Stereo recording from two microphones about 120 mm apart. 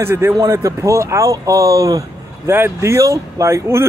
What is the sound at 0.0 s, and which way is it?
Speech, 20° right (ahead or behind).